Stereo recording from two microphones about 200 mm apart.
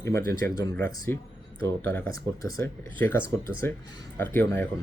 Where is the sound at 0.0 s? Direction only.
15° left (ahead or behind).